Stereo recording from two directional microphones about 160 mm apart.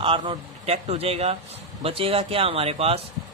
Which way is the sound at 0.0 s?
30° right (ahead or behind).